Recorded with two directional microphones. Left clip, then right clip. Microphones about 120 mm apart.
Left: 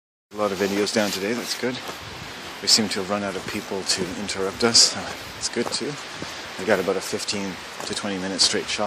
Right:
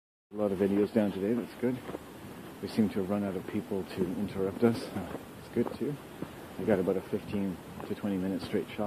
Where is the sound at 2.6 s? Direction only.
5° right (ahead or behind).